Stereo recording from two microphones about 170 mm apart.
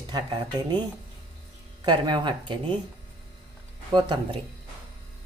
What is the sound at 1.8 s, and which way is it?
Speech, 25° right (ahead or behind).